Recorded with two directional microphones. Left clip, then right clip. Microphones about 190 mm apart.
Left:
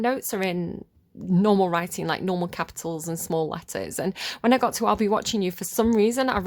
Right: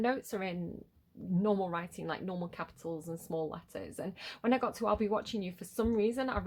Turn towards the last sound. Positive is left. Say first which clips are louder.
# left 10 dB
turn(degrees=45)  # may be behind; listen again after turning